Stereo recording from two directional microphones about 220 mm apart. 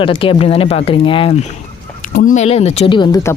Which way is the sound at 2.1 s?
35° left (ahead or behind).